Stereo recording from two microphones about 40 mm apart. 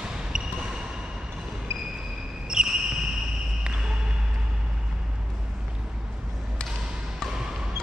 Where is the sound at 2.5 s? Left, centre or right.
Centre.